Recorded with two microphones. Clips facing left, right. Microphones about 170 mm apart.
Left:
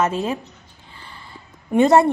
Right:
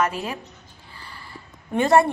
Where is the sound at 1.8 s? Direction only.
20° left (ahead or behind).